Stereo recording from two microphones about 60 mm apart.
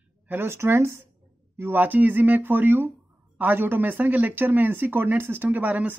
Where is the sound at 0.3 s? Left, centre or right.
Right.